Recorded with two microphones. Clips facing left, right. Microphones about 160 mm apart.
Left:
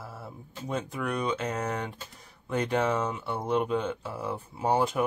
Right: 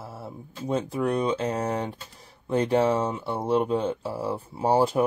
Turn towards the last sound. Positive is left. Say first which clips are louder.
# right 4 dB
turn(degrees=-35)  # may be behind; listen again after turning